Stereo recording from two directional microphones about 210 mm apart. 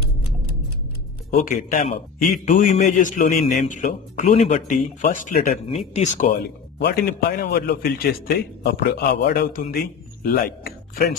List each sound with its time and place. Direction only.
1.3 s a man's voice: 40° left (ahead or behind)
6.8 s a man's voice: 50° left (ahead or behind)